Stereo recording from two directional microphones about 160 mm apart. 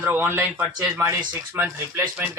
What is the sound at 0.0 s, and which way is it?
Speech, 10° right (ahead or behind).